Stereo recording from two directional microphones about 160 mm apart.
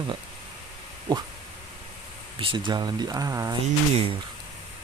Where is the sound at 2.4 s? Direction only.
30° right (ahead or behind).